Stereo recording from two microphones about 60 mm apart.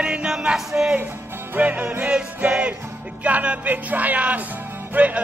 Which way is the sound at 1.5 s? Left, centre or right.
Right.